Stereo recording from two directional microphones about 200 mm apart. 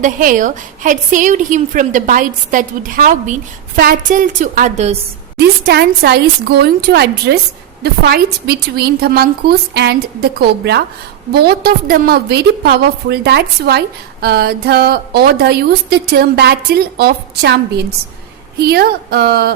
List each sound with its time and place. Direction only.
0.0 s a woman's voice: 40° right (ahead or behind)
5.4 s a woman's voice: 55° right (ahead or behind)